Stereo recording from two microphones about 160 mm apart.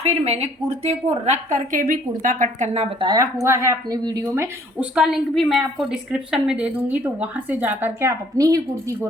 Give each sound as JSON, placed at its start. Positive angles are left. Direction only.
{"t": 0.0, "sound": "a woman's voice", "side_deg": -40}
{"t": 3.0, "sound": "speech", "side_deg": -25}
{"t": 4.8, "sound": "a woman's voice", "side_deg": -5}